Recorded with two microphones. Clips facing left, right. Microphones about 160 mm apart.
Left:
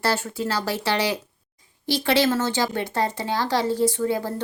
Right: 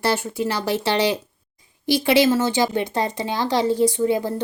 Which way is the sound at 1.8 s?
15° right (ahead or behind).